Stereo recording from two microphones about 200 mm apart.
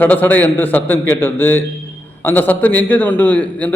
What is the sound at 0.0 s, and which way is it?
A man's voice, 10° left (ahead or behind).